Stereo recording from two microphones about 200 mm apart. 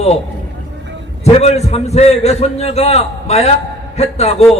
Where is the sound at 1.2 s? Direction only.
30° left (ahead or behind).